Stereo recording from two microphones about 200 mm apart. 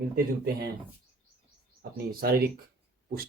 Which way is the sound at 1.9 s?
50° right (ahead or behind).